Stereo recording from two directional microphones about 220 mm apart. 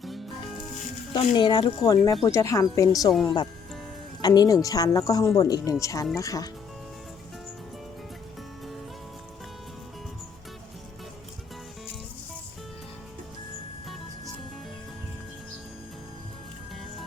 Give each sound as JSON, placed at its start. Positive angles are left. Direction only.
{"t": 1.1, "sound": "speech", "side_deg": 20}
{"t": 3.1, "sound": "speech", "side_deg": 0}
{"t": 4.2, "sound": "speech", "side_deg": 15}